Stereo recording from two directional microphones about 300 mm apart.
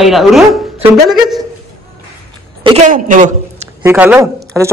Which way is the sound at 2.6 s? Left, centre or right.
Right.